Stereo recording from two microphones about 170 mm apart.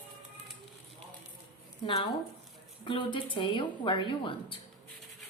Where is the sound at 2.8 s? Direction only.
30° left (ahead or behind).